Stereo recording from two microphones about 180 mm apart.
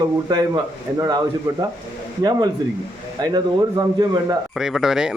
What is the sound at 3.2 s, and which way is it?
Speech, 20° right (ahead or behind).